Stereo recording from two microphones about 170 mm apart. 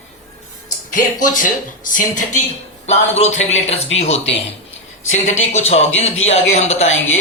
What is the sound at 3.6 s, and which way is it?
Speech, 35° left (ahead or behind).